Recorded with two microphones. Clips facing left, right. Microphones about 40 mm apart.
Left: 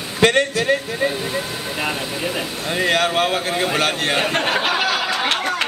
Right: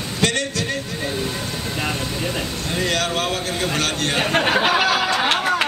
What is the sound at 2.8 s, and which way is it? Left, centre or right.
A man's voice, left.